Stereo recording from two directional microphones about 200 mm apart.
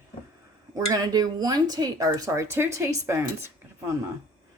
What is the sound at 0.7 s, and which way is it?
Speech, 20° right (ahead or behind).